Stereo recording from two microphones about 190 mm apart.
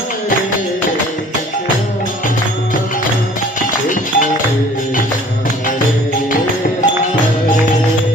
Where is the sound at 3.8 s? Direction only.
45° left (ahead or behind).